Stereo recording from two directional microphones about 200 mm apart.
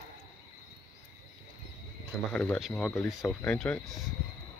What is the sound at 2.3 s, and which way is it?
Speech, 5° left (ahead or behind).